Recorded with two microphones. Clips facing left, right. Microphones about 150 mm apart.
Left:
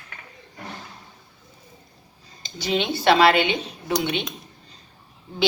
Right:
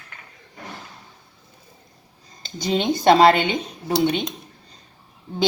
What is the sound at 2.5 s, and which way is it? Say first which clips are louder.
A woman's voice: right 3 dB; 40° right (ahead or behind).